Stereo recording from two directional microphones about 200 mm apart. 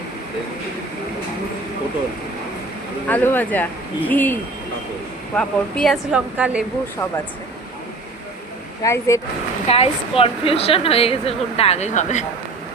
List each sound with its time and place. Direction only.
3.1 s speech: 10° left (ahead or behind)
5.4 s speech: 5° left (ahead or behind)
8.8 s speech: 15° left (ahead or behind)
9.6 s a woman's voice: 30° left (ahead or behind)